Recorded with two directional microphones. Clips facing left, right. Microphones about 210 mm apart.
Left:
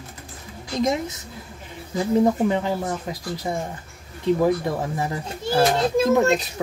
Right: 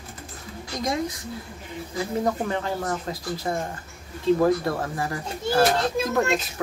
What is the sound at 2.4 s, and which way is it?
Speech, 15° left (ahead or behind).